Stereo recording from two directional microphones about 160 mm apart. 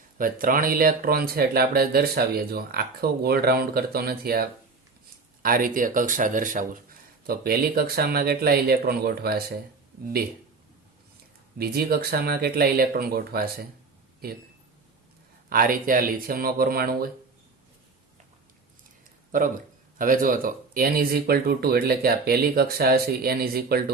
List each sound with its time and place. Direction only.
0.2 s speech: 60° right (ahead or behind)
7.3 s speech: 70° right (ahead or behind)
11.5 s speech: 70° right (ahead or behind)
15.4 s speech: 65° right (ahead or behind)
20.0 s speech: 60° right (ahead or behind); by 23.9 s 75° right (ahead or behind)